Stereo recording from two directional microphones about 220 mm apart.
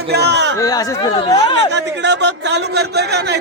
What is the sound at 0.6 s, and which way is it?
Speech, 15° left (ahead or behind).